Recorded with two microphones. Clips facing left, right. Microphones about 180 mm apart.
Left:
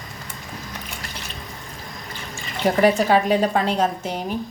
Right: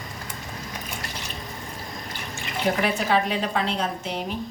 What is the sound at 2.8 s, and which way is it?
A woman's voice, 45° left (ahead or behind).